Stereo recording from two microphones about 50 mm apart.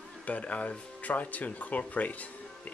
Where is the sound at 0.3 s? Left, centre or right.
Left.